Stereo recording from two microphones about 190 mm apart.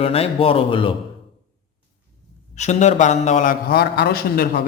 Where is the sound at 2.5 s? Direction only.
35° left (ahead or behind).